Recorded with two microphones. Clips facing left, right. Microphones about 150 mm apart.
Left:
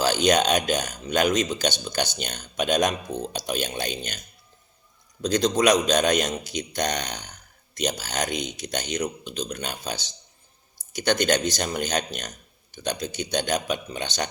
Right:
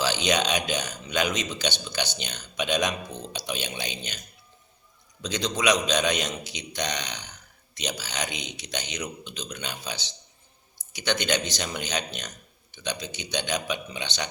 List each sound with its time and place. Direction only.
0.0 s speech: 50° left (ahead or behind)
5.2 s speech: 50° left (ahead or behind)